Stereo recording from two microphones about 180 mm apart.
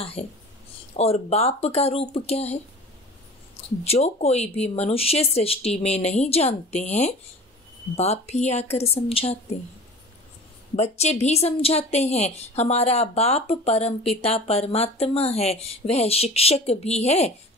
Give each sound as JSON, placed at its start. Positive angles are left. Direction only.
{"t": 0.9, "sound": "a woman's voice", "side_deg": 35}
{"t": 3.8, "sound": "a woman's voice", "side_deg": 35}
{"t": 10.8, "sound": "a woman's voice", "side_deg": 35}